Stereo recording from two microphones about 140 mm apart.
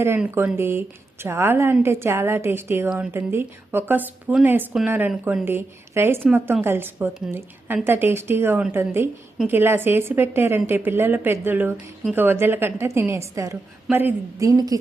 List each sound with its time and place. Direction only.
0.0 s a woman's voice: 15° right (ahead or behind)